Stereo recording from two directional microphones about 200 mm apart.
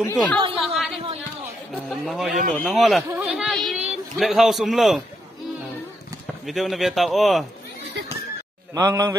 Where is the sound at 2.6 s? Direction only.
Centre (ahead or behind).